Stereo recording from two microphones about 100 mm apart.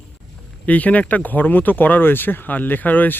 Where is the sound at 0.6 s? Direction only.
15° left (ahead or behind).